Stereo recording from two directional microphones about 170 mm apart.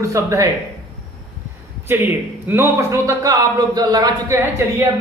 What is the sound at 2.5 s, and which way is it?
A man's voice, 15° right (ahead or behind).